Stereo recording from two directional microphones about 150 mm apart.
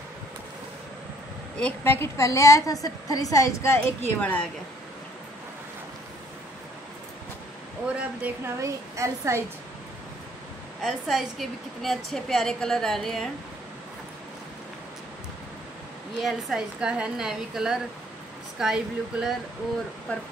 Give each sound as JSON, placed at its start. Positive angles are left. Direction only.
{"t": 1.6, "sound": "a woman's voice", "side_deg": 15}
{"t": 8.3, "sound": "speech", "side_deg": -10}
{"t": 8.6, "sound": "speech", "side_deg": -20}
{"t": 10.8, "sound": "a woman's voice", "side_deg": 0}
{"t": 16.2, "sound": "a woman's voice", "side_deg": 0}
{"t": 20.1, "sound": "speech", "side_deg": 10}